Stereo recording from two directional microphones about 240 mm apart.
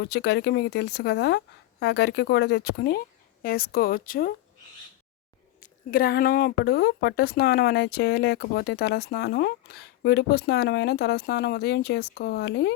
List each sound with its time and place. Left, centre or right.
0.0 s a woman's voice: left
5.5 s speech: left